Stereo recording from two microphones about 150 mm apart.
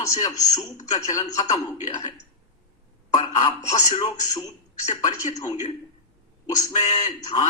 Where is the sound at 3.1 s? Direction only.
30° left (ahead or behind).